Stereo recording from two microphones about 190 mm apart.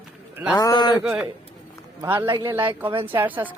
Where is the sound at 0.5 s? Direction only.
20° left (ahead or behind).